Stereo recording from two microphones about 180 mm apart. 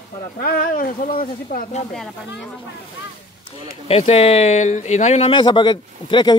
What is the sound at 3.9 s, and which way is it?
Speech, 35° left (ahead or behind).